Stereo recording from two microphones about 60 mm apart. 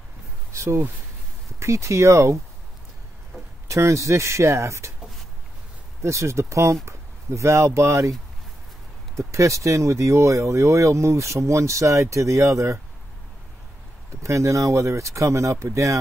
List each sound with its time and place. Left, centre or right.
0.5 s a sound: right
1.6 s speech: right
3.6 s speech: right
6.0 s speech: right
9.1 s speech: right
14.2 s speech: right